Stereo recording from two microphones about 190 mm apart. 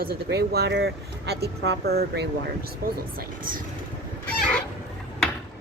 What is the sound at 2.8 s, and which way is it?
Speech, 50° right (ahead or behind).